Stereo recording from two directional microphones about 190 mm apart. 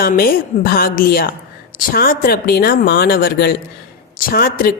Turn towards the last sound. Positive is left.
turn(degrees=50)  # may be behind; listen again after turning